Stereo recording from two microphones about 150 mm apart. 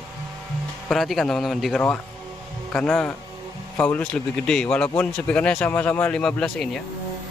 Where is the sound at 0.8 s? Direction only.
Centre (ahead or behind).